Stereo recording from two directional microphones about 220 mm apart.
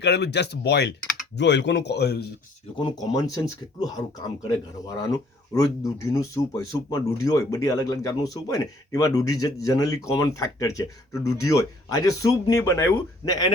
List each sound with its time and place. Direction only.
0.0 s speech: 50° left (ahead or behind)
2.7 s speech: 20° left (ahead or behind)
5.5 s speech: 15° left (ahead or behind)